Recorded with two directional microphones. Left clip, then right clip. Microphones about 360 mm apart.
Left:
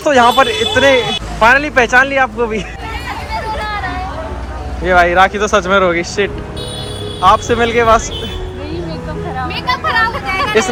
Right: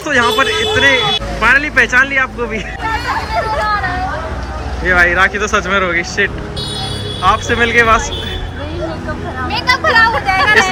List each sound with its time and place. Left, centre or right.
0.0 s speech: centre
4.9 s speech: centre
9.5 s a sound: right